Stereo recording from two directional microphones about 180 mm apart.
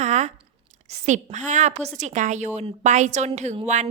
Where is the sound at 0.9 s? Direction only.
40° right (ahead or behind).